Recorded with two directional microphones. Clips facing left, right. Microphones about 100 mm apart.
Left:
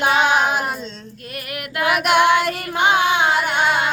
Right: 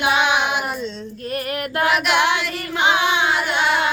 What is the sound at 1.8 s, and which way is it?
Singing, 50° left (ahead or behind).